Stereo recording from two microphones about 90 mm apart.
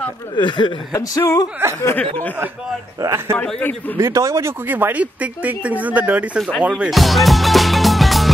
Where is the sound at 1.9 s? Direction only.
20° left (ahead or behind).